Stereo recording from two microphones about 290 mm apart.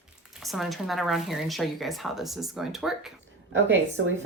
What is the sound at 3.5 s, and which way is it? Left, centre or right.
Speech, right.